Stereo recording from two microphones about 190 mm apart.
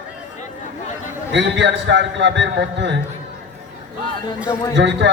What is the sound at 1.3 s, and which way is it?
A man's voice, 70° right (ahead or behind).